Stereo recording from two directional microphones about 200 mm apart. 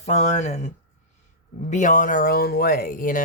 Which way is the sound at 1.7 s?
40° left (ahead or behind).